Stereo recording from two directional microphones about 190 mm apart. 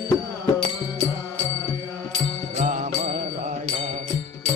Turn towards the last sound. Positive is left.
turn(degrees=-40)  # may be behind; listen again after turning